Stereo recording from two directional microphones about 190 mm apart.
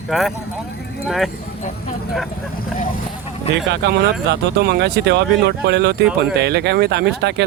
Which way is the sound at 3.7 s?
65° right (ahead or behind).